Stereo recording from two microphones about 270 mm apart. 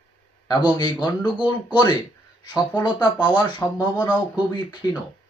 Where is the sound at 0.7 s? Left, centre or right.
Centre.